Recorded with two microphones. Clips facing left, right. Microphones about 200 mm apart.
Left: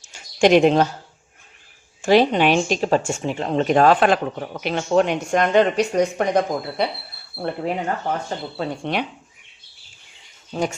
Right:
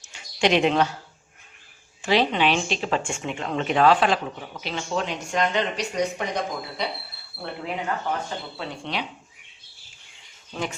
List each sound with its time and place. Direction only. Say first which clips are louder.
0.1 s a sound: left 7 dB; 45° left (ahead or behind)
2.0 s speech: left 6 dB; 45° left (ahead or behind)
10.5 s speech: left 6 dB; 40° left (ahead or behind)